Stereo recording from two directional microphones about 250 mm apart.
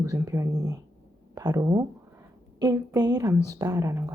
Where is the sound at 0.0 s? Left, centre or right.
Centre.